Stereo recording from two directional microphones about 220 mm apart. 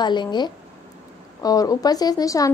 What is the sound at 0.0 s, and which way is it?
A woman's voice, 20° left (ahead or behind).